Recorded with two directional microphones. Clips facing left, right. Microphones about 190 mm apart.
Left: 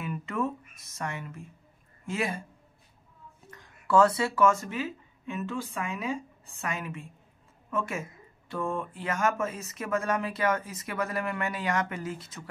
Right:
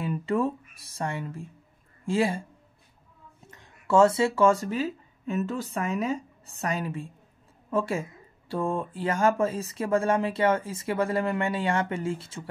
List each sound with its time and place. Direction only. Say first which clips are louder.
0.0 s speech: right 5 dB; 30° right (ahead or behind)
3.4 s speech: right 2 dB; 25° right (ahead or behind)